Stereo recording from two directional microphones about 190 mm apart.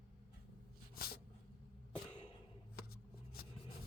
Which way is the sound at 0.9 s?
50° left (ahead or behind).